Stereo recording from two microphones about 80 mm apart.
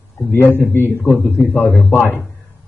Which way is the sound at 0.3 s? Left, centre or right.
Left.